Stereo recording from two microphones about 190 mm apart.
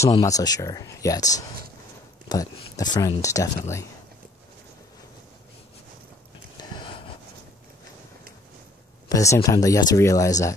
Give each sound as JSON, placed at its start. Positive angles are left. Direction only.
{"t": 0.1, "sound": "speech", "side_deg": 20}
{"t": 6.7, "sound": "a sound", "side_deg": 25}
{"t": 9.1, "sound": "speech", "side_deg": 15}